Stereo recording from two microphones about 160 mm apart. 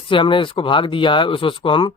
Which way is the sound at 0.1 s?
30° left (ahead or behind).